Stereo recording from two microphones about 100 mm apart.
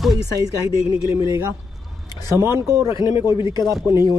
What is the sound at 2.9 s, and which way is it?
Speech, 60° left (ahead or behind).